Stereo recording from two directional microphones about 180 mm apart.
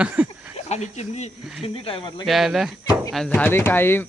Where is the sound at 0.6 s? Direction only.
35° left (ahead or behind).